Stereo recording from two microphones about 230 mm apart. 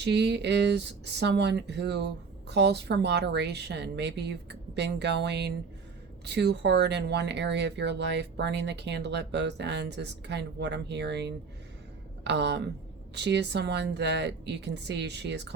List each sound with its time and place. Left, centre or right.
0.0 s speech: right